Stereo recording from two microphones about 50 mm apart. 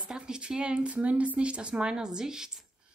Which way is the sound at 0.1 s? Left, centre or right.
Centre.